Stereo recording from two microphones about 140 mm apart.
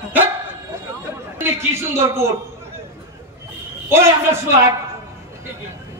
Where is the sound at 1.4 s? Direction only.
20° right (ahead or behind).